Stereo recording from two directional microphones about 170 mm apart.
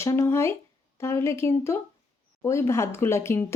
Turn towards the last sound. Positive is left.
turn(degrees=15)  # may be behind; listen again after turning